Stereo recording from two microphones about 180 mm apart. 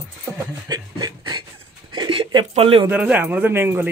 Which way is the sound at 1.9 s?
30° right (ahead or behind).